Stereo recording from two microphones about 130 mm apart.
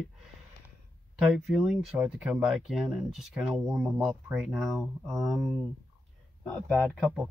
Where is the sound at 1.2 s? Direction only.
5° right (ahead or behind).